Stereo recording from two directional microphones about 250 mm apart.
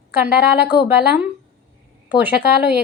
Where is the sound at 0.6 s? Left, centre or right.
Left.